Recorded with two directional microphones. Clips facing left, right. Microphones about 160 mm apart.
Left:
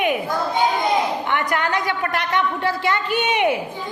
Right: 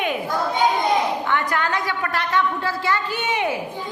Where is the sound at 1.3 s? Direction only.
15° left (ahead or behind).